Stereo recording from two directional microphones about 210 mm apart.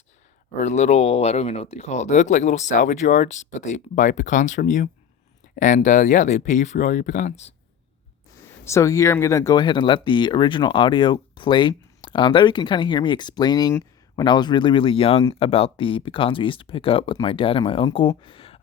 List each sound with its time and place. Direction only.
0.5 s speech: 30° left (ahead or behind)
8.6 s speech: 15° left (ahead or behind)